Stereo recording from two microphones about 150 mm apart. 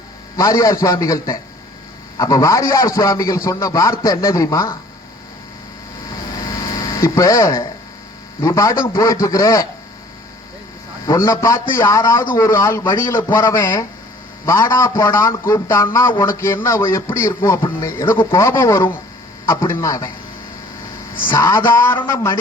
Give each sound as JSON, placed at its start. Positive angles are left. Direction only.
{"t": 0.3, "sound": "a man's voice", "side_deg": 20}
{"t": 6.9, "sound": "a man's voice", "side_deg": 20}
{"t": 11.0, "sound": "a man's voice", "side_deg": 20}
{"t": 21.2, "sound": "a man's voice", "side_deg": 25}